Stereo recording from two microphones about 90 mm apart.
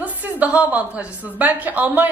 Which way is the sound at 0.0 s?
15° right (ahead or behind).